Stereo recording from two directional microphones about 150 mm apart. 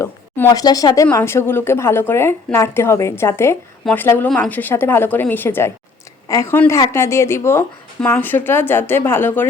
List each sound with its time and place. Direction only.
0.0 s a woman's voice: 20° left (ahead or behind)